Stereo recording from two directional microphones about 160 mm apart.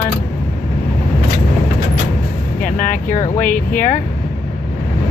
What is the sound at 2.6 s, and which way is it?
Speech, 55° left (ahead or behind).